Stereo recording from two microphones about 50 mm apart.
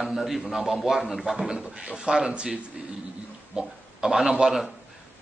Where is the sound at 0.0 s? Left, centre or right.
Centre.